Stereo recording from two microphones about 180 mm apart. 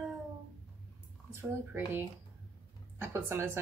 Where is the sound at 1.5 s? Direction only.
15° right (ahead or behind).